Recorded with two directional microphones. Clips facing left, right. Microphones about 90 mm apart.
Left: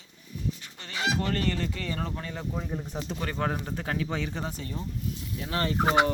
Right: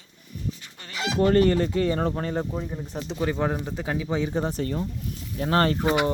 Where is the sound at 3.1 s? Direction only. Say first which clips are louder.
Right 6 dB; 10° right (ahead or behind).